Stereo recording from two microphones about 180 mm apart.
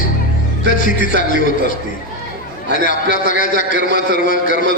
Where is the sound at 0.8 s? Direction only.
50° left (ahead or behind).